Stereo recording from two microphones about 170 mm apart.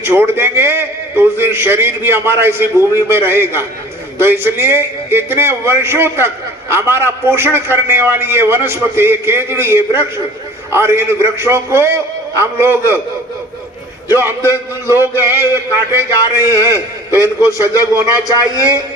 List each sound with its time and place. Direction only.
0.0 s a man's voice: 15° right (ahead or behind)
14.1 s a man's voice: 15° right (ahead or behind)
18.3 s a man's voice: 20° left (ahead or behind)